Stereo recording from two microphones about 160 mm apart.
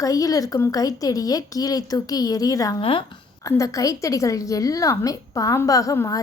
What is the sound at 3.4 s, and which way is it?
A woman's voice, 20° left (ahead or behind).